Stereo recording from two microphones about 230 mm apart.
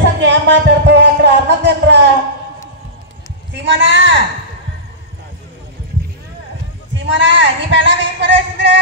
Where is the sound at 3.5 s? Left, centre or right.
Right.